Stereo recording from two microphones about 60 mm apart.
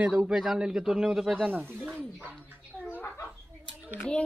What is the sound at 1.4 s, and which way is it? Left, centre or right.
Speech, right.